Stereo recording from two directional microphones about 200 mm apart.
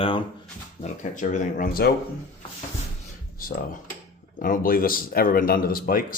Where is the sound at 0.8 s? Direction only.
40° left (ahead or behind).